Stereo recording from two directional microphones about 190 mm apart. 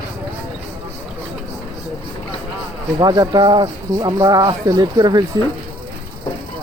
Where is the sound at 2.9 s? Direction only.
20° right (ahead or behind).